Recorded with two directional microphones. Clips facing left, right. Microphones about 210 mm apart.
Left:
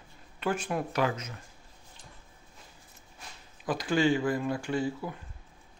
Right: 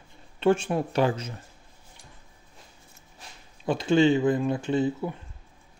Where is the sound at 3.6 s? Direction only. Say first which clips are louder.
Right 6 dB; 25° right (ahead or behind).